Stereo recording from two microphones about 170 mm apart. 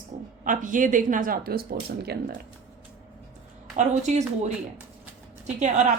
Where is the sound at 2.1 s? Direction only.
70° right (ahead or behind).